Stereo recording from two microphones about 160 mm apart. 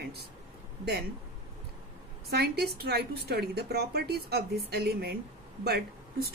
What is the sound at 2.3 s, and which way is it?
A woman's voice, 90° right.